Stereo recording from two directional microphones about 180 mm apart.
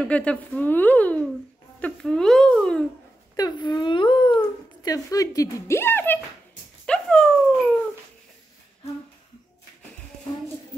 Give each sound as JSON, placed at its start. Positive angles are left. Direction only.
{"t": 0.0, "sound": "speech", "side_deg": 5}
{"t": 3.3, "sound": "speech", "side_deg": 20}
{"t": 6.9, "sound": "dog", "side_deg": 5}